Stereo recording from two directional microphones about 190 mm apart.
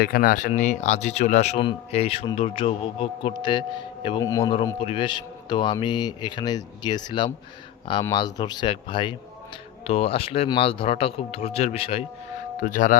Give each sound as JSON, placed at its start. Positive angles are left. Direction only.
{"t": 0.0, "sound": "speech", "side_deg": 50}
{"t": 4.8, "sound": "speech", "side_deg": 30}
{"t": 12.5, "sound": "speech", "side_deg": 45}